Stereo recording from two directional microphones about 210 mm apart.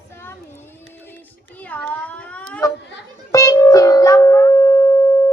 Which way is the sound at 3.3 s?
15° left (ahead or behind).